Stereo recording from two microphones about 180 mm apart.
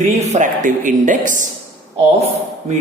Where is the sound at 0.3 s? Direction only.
45° right (ahead or behind).